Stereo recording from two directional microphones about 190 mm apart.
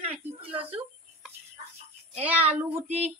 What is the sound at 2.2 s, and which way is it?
Speech, 10° right (ahead or behind).